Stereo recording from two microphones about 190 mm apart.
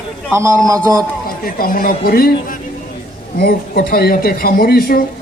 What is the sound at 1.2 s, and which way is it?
A man's voice, 50° left (ahead or behind).